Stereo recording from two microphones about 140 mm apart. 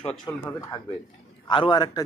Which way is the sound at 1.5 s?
35° left (ahead or behind).